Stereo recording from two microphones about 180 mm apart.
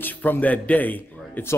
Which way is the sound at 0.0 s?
10° left (ahead or behind).